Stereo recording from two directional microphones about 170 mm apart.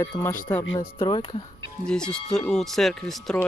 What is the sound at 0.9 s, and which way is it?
Speech, 30° left (ahead or behind).